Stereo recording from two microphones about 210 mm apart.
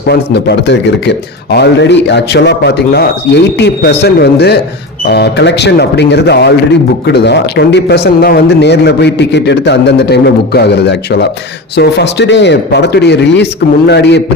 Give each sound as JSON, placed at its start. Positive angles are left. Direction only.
{"t": 0.1, "sound": "a man's voice", "side_deg": 55}